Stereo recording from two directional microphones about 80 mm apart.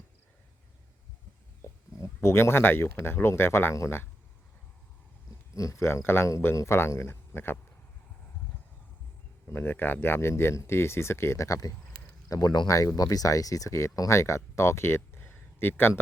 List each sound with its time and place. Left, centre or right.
1.6 s speech: left
5.5 s speech: left
9.5 s speech: left
12.3 s speech: left